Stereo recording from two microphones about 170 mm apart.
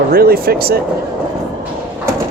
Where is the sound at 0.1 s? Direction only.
65° right (ahead or behind).